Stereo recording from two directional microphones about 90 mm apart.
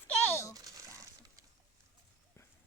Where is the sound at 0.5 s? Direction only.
40° right (ahead or behind).